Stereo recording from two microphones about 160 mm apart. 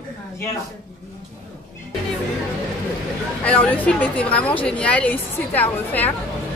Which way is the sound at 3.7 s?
10° left (ahead or behind).